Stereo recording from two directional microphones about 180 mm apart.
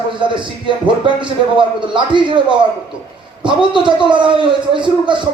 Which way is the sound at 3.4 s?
25° right (ahead or behind).